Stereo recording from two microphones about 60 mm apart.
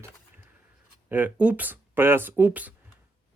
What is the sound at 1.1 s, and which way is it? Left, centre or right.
Speech, right.